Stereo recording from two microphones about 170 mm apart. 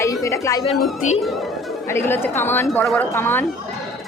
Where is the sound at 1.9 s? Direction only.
15° left (ahead or behind).